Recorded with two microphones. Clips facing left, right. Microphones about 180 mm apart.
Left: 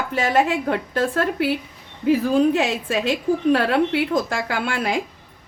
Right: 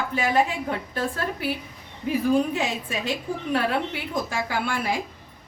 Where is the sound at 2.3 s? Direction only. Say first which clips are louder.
Left 5 dB; 90° left.